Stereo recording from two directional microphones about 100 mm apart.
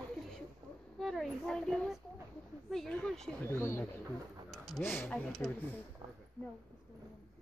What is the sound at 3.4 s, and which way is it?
Speech, 25° left (ahead or behind).